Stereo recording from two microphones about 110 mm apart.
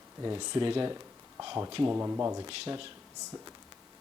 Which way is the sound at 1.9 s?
25° right (ahead or behind).